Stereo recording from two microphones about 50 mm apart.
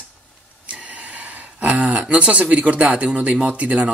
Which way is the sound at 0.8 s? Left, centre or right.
Right.